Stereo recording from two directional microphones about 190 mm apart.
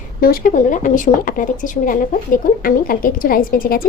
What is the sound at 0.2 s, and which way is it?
Speech, 50° left (ahead or behind).